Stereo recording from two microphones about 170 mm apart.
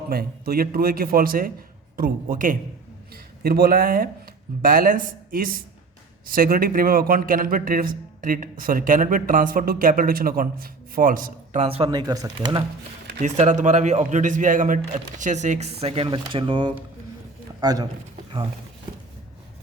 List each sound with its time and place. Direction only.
0.1 s a man's voice: 65° right (ahead or behind); by 12.6 s 20° right (ahead or behind)
13.2 s a man's voice: 45° right (ahead or behind); by 17.8 s 20° right (ahead or behind)